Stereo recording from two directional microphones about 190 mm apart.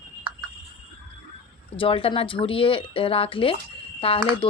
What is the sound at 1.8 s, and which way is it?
Speech, 30° left (ahead or behind).